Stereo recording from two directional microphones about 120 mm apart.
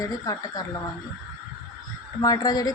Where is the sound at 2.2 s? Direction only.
30° left (ahead or behind).